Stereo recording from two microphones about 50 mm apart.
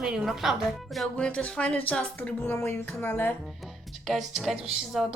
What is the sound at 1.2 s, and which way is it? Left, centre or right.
Speech, left.